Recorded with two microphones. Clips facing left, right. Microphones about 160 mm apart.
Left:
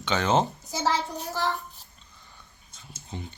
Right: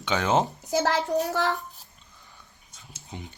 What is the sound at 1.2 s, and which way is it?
Speech, 70° right (ahead or behind).